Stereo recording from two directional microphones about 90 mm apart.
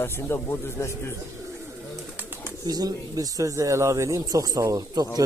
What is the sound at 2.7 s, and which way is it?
Speech, 45° right (ahead or behind).